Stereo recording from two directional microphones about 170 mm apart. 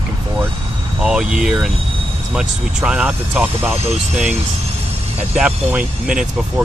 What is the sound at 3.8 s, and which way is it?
Speech, 40° right (ahead or behind).